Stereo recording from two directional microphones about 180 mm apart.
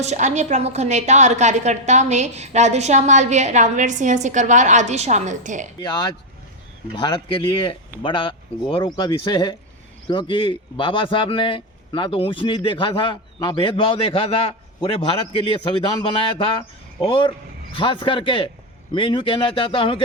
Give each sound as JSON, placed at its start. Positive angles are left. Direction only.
{"t": 0.0, "sound": "a woman's voice", "side_deg": -40}
{"t": 5.8, "sound": "speech", "side_deg": 20}